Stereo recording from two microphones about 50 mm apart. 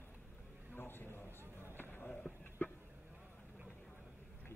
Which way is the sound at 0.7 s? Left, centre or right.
Left.